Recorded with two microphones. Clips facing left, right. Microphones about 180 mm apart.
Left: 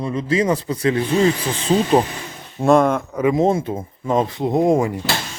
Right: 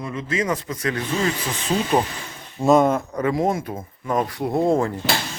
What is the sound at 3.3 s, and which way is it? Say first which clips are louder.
Speech: left 5 dB; 25° left (ahead or behind).